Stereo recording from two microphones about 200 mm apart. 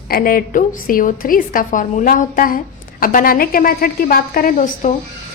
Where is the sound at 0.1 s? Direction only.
45° left (ahead or behind).